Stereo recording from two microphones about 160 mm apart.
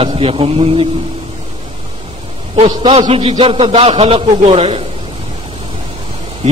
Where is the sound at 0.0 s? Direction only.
35° right (ahead or behind).